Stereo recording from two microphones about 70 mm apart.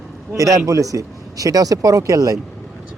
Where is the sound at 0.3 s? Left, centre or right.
Right.